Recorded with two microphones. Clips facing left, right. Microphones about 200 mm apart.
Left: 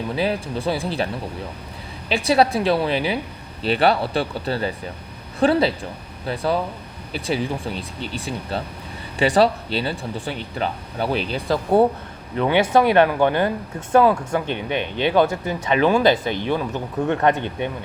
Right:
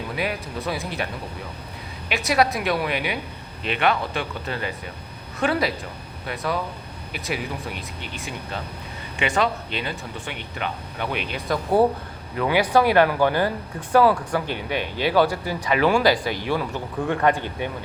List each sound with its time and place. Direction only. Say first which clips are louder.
0.2 s speech: left 5 dB; 30° left (ahead or behind)